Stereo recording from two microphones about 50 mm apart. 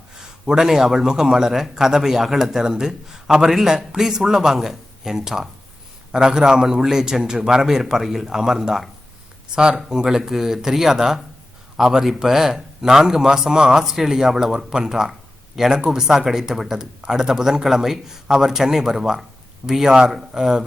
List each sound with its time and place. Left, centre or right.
0.2 s speech: centre